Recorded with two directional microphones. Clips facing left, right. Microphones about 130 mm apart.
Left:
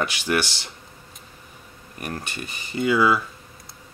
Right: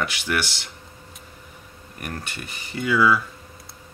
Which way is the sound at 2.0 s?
20° left (ahead or behind).